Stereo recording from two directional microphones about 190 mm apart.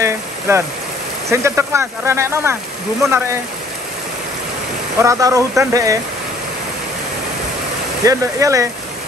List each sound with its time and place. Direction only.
0.0 s rain: 15° right (ahead or behind)
1.3 s speech: 15° right (ahead or behind)
4.9 s speech: 15° right (ahead or behind)
8.0 s speech: 15° right (ahead or behind)